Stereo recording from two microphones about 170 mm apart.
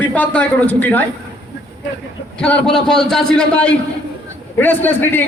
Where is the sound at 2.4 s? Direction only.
5° left (ahead or behind).